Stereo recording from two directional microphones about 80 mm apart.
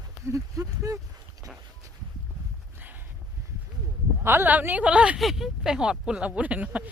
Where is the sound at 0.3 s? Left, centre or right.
Right.